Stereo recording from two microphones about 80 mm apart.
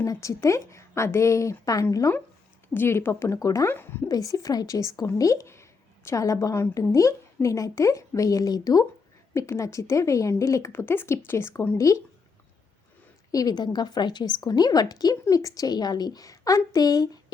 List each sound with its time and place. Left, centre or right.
0.0 s a woman's voice: left
2.7 s a woman's voice: left
3.7 s speech: left
4.1 s a woman's voice: left
10.7 s a woman's voice: left
13.3 s a woman's voice: left